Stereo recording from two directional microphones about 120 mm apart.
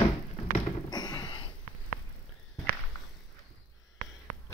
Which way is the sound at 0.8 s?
35° left (ahead or behind).